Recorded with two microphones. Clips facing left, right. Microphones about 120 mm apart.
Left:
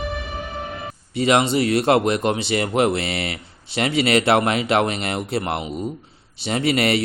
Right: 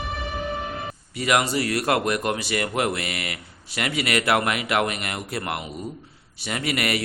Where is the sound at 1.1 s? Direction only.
25° left (ahead or behind).